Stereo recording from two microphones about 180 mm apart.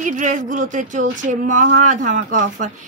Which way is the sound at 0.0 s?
45° right (ahead or behind).